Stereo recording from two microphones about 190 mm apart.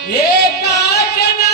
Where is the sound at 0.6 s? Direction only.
55° left (ahead or behind).